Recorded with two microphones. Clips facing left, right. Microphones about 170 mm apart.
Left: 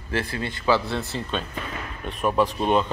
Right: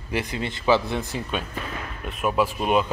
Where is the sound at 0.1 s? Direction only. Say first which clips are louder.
Even; 15° right (ahead or behind).